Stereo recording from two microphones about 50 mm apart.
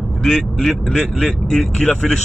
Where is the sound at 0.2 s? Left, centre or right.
Centre.